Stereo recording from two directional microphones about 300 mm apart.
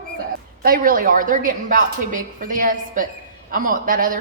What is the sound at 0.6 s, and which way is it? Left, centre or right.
Speech, right.